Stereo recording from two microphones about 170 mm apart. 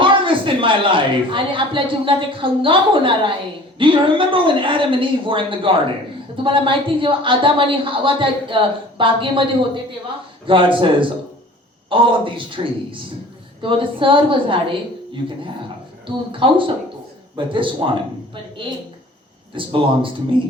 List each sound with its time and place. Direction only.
0.0 s a man's voice: 30° right (ahead or behind)
16.3 s a woman's voice: 30° right (ahead or behind)
19.5 s a woman's voice: 30° right (ahead or behind)